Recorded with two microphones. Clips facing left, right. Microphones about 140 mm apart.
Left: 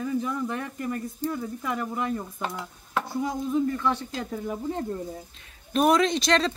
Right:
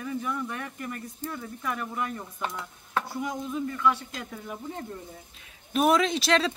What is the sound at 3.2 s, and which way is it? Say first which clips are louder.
Speech: left 5 dB; 30° left (ahead or behind).